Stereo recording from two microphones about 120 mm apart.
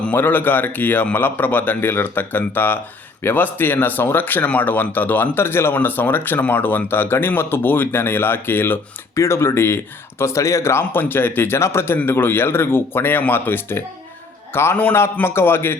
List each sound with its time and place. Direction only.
0.0 s a man's voice: 15° left (ahead or behind)